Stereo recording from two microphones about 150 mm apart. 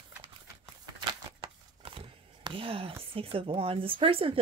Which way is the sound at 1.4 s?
35° right (ahead or behind).